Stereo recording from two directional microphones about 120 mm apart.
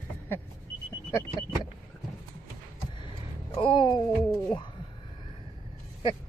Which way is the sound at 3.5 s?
45° left (ahead or behind).